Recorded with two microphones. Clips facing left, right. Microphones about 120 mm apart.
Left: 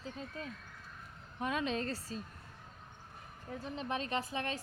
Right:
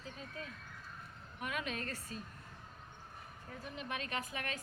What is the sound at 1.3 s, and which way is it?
Speech, 30° left (ahead or behind).